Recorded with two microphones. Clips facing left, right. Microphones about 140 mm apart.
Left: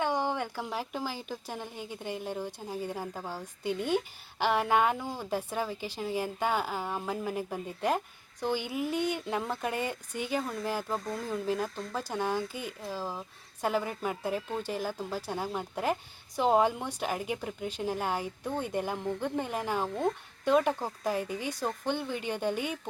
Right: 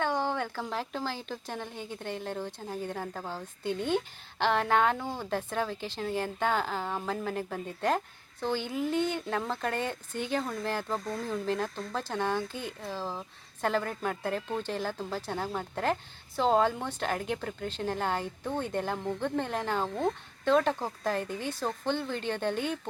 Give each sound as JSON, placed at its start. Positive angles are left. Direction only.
{"t": 0.0, "sound": "a woman's voice", "side_deg": 15}